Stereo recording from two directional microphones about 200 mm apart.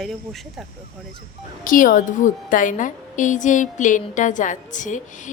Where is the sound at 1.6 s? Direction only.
40° left (ahead or behind).